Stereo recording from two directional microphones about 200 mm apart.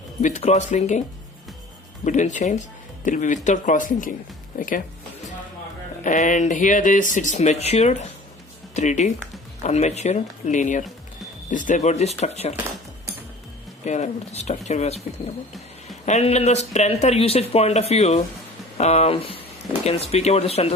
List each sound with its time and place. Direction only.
0.2 s speech: 35° left (ahead or behind)
2.0 s speech: 35° left (ahead or behind)
6.0 s speech: 40° left (ahead or behind)
13.8 s speech: 35° left (ahead or behind)
16.0 s speech: 35° left (ahead or behind)